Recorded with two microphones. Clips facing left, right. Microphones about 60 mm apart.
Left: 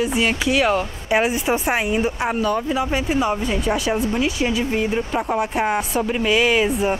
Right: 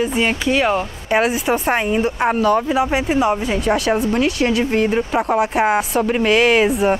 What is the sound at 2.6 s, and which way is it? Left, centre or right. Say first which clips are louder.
Speech: right 4 dB; centre.